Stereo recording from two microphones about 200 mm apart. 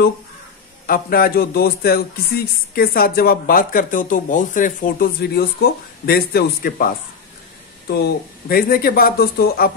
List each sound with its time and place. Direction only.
0.8 s speech: 45° left (ahead or behind)
7.9 s speech: 50° left (ahead or behind)